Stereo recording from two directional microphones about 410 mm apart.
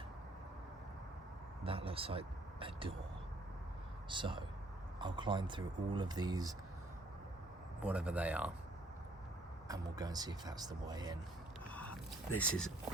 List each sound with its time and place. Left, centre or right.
1.6 s speech: centre
4.1 s speech: centre
7.8 s a man's voice: centre
9.6 s speech: centre
12.3 s speech: left